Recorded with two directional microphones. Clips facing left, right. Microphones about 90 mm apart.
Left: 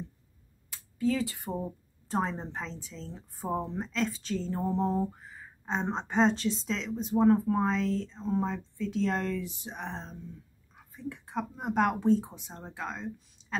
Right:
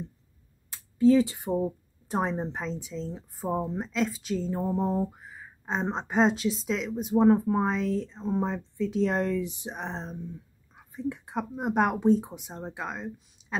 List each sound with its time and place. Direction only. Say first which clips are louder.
0.7 s speech: right 9 dB; 25° right (ahead or behind)